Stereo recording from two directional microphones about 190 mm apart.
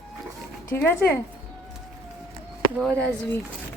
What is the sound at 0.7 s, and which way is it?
Speech, 10° left (ahead or behind).